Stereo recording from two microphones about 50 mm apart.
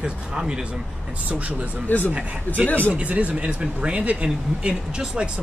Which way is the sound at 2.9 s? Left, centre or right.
Right.